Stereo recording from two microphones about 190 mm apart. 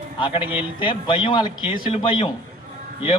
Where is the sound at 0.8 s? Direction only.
25° left (ahead or behind).